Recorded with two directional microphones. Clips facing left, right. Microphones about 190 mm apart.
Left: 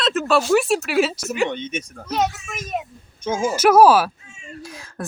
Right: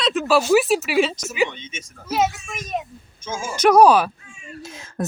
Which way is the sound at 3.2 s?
60° left (ahead or behind).